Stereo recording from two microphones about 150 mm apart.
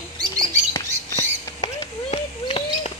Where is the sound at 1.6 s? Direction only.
40° left (ahead or behind).